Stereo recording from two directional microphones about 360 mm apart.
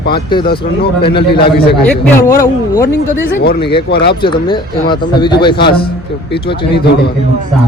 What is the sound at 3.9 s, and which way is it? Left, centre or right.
Speech, left.